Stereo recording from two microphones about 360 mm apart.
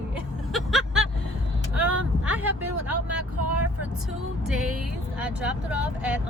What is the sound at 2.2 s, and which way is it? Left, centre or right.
Speech, centre.